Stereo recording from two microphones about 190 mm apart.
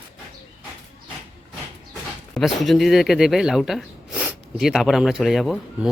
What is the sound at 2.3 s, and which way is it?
Speech, centre (ahead or behind).